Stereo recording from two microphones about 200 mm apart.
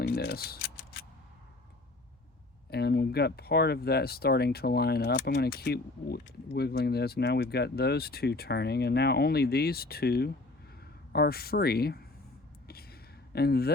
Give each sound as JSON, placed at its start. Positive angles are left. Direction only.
{"t": 0.0, "sound": "speech", "side_deg": 50}
{"t": 2.6, "sound": "speech", "side_deg": 55}
{"t": 12.6, "sound": "a sound", "side_deg": 50}